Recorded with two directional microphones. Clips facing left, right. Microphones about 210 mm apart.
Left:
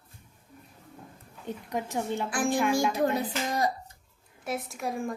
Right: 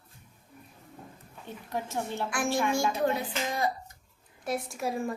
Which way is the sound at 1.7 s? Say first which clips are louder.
Left 2 dB; 15° left (ahead or behind).